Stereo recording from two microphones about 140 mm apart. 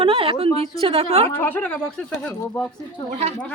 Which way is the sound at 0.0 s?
40° right (ahead or behind).